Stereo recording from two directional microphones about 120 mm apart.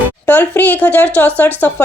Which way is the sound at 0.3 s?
15° left (ahead or behind).